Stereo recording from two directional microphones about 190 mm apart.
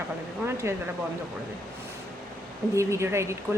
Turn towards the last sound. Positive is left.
turn(degrees=-15)  # may be behind; listen again after turning